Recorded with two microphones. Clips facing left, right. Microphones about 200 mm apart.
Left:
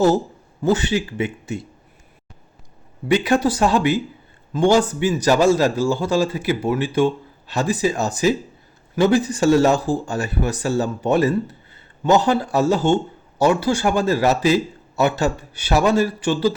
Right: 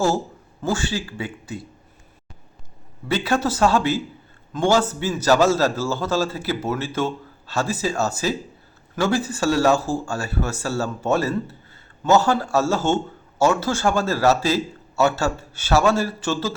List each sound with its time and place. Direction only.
0.6 s speech: 20° left (ahead or behind)
3.1 s speech: 15° left (ahead or behind)